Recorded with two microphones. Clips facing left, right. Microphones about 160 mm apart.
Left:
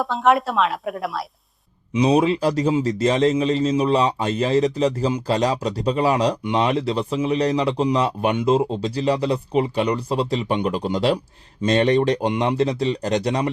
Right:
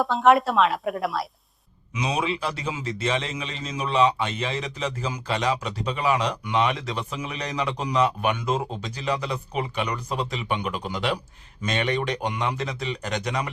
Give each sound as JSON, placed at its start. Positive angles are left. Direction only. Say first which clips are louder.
{"t": 0.0, "sound": "speech", "louder": "even", "side_deg": 0}
{"t": 1.9, "sound": "a man's voice", "louder": "left 10 dB", "side_deg": 35}